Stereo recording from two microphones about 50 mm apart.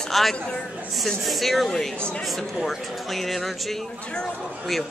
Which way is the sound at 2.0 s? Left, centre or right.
Centre.